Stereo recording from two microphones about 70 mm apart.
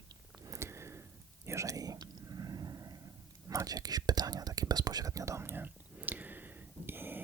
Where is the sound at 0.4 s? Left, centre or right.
Right.